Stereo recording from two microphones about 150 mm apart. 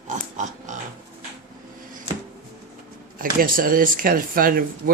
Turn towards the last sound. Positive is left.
turn(degrees=-70)  # may be behind; listen again after turning